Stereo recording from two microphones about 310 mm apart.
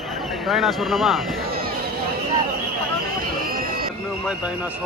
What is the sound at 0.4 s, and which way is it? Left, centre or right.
Speech, centre.